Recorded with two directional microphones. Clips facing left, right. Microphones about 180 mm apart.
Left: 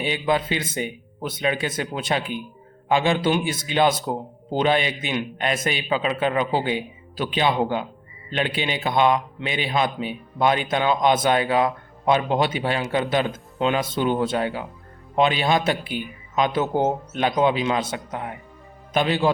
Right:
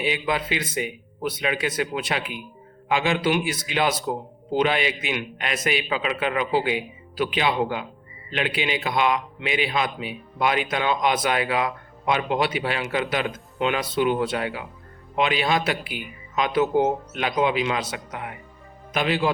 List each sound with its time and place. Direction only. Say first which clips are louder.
0.1 s a man's voice: left 6 dB; 30° left (ahead or behind)